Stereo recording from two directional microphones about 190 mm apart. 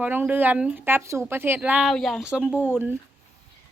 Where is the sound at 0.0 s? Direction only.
10° right (ahead or behind).